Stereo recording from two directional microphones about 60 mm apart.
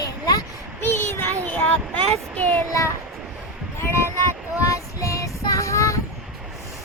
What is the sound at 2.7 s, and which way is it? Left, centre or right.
Child singing, left.